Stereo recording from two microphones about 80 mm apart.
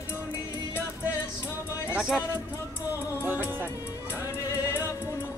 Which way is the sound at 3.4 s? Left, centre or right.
Right.